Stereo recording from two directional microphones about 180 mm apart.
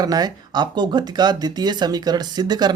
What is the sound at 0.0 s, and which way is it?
Speech, 20° right (ahead or behind).